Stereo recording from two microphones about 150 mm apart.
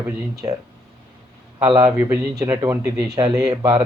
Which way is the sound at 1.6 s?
30° right (ahead or behind).